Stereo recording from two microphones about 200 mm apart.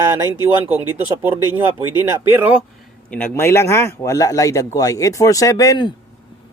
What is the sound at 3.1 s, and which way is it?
Speech, 10° left (ahead or behind).